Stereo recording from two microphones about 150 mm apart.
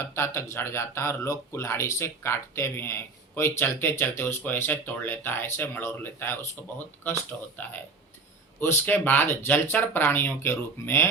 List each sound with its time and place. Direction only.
0.1 s speech: 15° left (ahead or behind)